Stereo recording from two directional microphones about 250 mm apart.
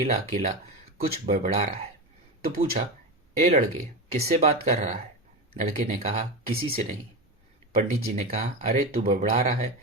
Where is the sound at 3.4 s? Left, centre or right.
Right.